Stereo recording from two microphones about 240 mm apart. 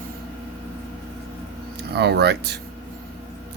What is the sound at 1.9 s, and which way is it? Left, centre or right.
Speech, right.